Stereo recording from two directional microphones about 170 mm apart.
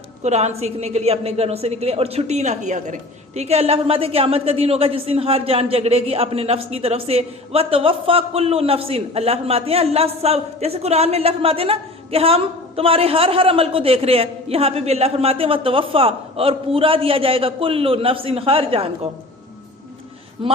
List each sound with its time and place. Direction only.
0.2 s a woman's voice: 40° right (ahead or behind)